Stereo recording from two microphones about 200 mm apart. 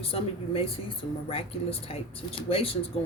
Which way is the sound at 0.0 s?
30° left (ahead or behind).